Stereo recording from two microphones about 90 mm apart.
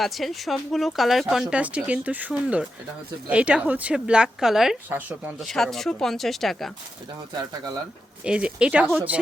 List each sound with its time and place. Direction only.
0.0 s speech: centre (ahead or behind)
4.9 s speech: 20° right (ahead or behind)
5.4 s speech: 5° left (ahead or behind)
8.2 s speech: 10° right (ahead or behind)